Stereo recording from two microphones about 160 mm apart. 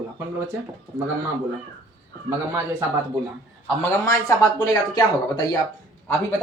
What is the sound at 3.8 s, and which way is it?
A woman's voice, 15° left (ahead or behind).